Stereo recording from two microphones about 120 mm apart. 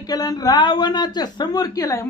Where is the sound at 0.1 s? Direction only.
30° left (ahead or behind).